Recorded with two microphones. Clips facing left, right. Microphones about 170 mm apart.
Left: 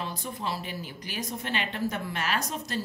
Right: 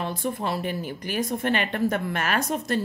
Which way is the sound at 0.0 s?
55° right (ahead or behind).